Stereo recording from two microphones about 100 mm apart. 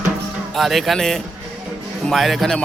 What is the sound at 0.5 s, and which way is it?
A man's voice, centre (ahead or behind).